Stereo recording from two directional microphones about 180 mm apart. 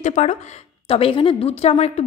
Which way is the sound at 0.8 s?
30° left (ahead or behind).